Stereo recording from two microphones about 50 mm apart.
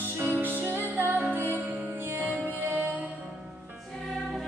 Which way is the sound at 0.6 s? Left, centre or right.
Right.